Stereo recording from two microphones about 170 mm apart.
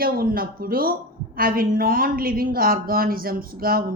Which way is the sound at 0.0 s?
60° right (ahead or behind).